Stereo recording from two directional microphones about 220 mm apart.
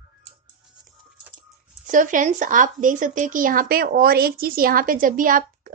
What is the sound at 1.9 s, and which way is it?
Speech, 35° right (ahead or behind).